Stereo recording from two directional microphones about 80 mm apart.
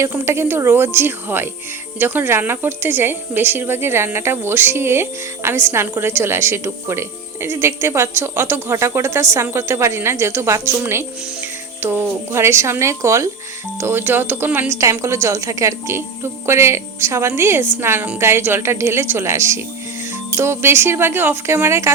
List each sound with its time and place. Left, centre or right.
0.0 s a woman's voice: right
14.8 s a woman's voice: right